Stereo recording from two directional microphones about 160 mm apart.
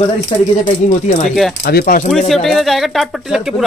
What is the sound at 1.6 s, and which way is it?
Speech, 70° left (ahead or behind).